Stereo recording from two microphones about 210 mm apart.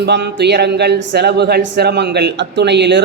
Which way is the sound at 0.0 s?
55° right (ahead or behind).